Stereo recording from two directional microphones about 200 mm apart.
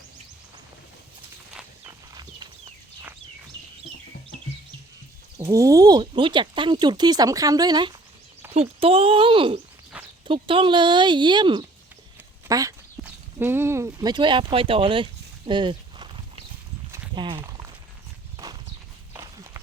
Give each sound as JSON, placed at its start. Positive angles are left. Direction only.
{"t": 5.4, "sound": "speech", "side_deg": -15}
{"t": 12.5, "sound": "a sound", "side_deg": -15}
{"t": 16.9, "sound": "walk", "side_deg": -25}
{"t": 18.4, "sound": "clip-clop", "side_deg": -15}